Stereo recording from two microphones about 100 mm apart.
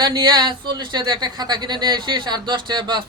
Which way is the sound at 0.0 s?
45° right (ahead or behind).